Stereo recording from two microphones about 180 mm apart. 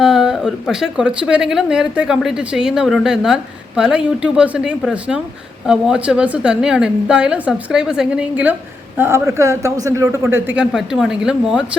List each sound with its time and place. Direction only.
0.0 s a woman's voice: 5° right (ahead or behind)